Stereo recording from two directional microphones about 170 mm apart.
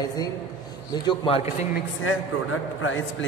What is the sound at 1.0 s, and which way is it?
Speech, 30° left (ahead or behind).